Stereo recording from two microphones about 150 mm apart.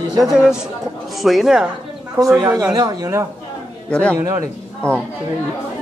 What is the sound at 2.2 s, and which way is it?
Speech, 20° right (ahead or behind).